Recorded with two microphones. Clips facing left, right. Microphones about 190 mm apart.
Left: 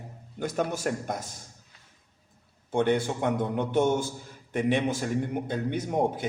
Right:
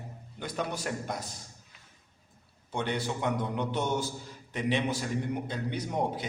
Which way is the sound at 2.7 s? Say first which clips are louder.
Left 7 dB; 50° left (ahead or behind).